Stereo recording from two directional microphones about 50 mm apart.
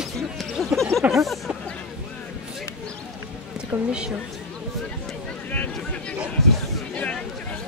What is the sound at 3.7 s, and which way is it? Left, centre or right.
Speech, right.